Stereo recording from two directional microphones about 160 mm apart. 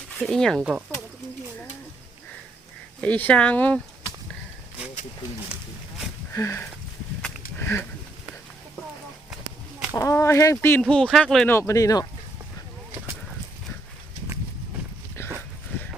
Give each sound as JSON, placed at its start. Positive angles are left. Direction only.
{"t": 0.2, "sound": "speech", "side_deg": 5}
{"t": 3.0, "sound": "speech", "side_deg": 10}
{"t": 6.3, "sound": "speech", "side_deg": 20}
{"t": 7.6, "sound": "a sound", "side_deg": 15}
{"t": 9.9, "sound": "speech", "side_deg": 20}
{"t": 11.4, "sound": "speech", "side_deg": 15}
{"t": 15.2, "sound": "dog", "side_deg": 15}